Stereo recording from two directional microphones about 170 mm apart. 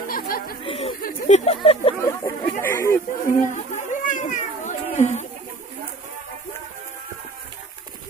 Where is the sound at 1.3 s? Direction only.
45° left (ahead or behind).